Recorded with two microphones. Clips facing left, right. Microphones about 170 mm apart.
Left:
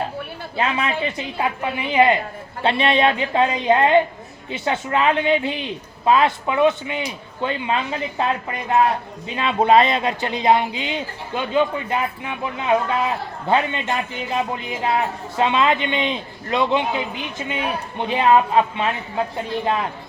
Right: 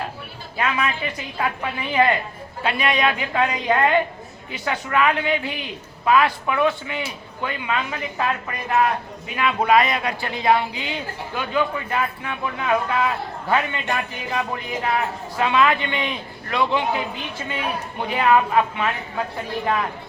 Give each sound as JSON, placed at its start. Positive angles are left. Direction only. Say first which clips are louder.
{"t": 0.5, "sound": "a woman's voice", "louder": "left 1 dB", "side_deg": 25}